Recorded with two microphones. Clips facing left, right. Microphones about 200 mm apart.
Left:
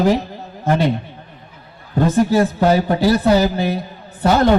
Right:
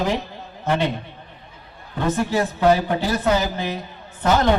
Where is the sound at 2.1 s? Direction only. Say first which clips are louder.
Left 9 dB; 40° left (ahead or behind).